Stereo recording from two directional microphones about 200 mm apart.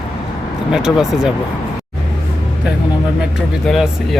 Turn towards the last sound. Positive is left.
turn(degrees=0)  # may be behind; listen again after turning